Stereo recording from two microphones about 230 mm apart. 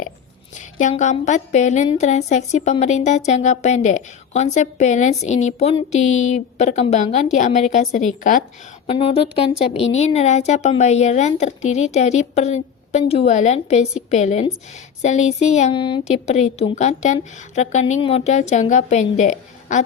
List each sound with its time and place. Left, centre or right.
0.8 s a woman's voice: left